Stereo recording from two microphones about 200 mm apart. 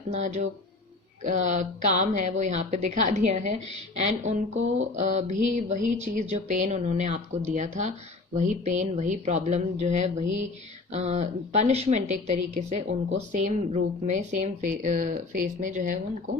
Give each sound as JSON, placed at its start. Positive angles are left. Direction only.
{"t": 0.1, "sound": "speech", "side_deg": -35}